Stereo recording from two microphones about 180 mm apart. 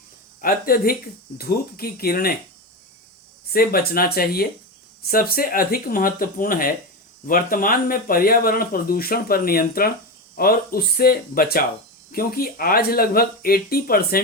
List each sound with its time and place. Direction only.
0.4 s speech: 55° left (ahead or behind)
3.5 s speech: 55° left (ahead or behind)